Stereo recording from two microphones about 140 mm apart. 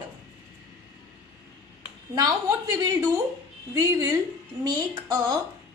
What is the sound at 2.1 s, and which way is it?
A woman's voice, 25° right (ahead or behind).